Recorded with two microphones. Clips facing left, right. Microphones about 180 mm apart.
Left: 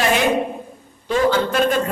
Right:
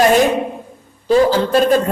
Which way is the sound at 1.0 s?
35° right (ahead or behind).